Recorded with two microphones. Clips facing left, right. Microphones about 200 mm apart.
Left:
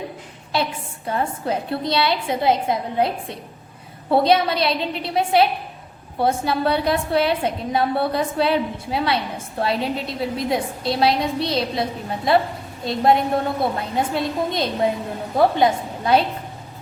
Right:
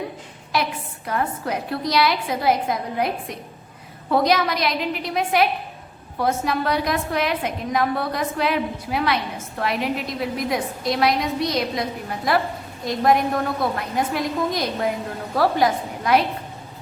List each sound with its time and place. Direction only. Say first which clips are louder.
0.5 s a woman's voice: left 1 dB; 30° left (ahead or behind)